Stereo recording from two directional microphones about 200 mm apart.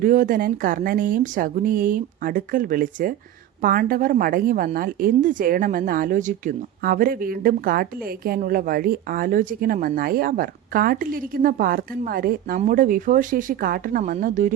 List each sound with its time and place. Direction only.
0.0 s a woman's voice: 40° right (ahead or behind)